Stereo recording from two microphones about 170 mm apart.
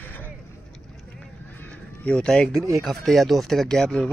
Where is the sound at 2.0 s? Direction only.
5° left (ahead or behind).